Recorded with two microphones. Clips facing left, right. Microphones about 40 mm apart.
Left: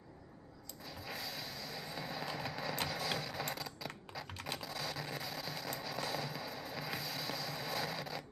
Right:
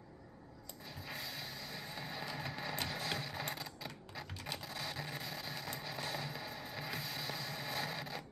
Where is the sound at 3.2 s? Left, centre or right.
Centre.